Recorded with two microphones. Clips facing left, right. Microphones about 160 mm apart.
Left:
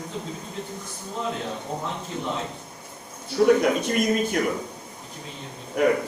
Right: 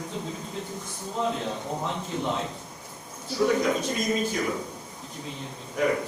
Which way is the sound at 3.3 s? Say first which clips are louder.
Left 5 dB; 60° left (ahead or behind).